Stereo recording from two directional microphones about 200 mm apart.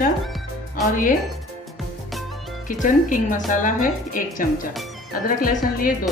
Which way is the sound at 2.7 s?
40° left (ahead or behind).